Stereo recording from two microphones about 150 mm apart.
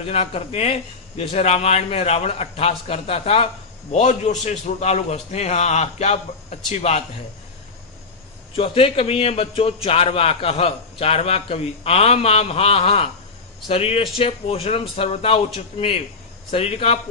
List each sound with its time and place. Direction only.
0.0 s a man's voice: 40° left (ahead or behind)
8.5 s a man's voice: 40° left (ahead or behind)